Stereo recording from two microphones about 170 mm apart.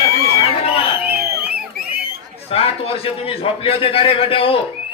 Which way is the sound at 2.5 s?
35° left (ahead or behind).